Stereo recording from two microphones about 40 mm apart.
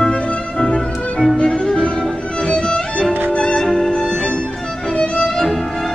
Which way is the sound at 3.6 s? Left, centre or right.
Centre.